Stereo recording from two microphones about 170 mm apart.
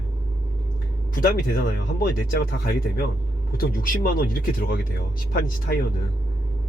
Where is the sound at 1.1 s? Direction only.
55° left (ahead or behind).